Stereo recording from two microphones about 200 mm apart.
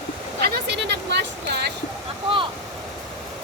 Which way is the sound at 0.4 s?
55° right (ahead or behind).